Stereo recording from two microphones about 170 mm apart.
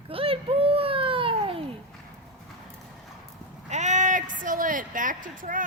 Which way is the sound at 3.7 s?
45° right (ahead or behind).